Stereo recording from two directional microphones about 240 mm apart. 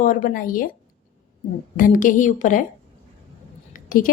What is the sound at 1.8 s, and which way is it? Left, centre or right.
Speech, left.